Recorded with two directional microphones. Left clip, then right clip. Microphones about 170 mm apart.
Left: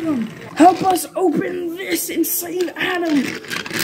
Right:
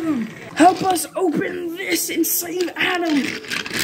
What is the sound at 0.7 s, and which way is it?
Speech, centre (ahead or behind).